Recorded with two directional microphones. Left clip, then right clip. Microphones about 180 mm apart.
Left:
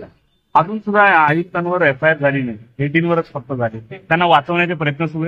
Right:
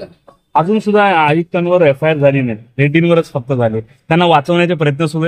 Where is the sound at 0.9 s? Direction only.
60° right (ahead or behind).